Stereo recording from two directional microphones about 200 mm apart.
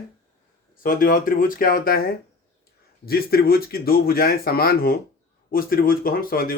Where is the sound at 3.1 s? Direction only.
50° left (ahead or behind).